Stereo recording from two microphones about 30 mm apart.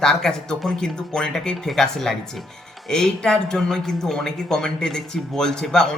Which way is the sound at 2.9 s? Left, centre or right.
Left.